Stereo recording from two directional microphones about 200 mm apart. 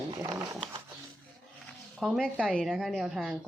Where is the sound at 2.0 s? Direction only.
Centre (ahead or behind).